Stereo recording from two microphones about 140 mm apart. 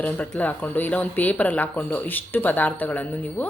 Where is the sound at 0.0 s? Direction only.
10° left (ahead or behind).